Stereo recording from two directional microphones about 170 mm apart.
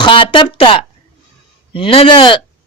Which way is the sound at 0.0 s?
30° left (ahead or behind).